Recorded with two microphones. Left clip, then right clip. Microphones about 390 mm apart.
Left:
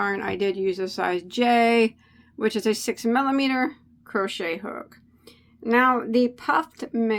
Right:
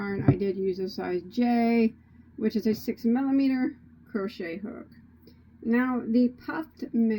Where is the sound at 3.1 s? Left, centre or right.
Left.